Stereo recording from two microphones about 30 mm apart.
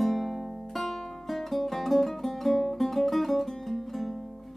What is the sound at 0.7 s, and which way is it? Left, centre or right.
Music, centre.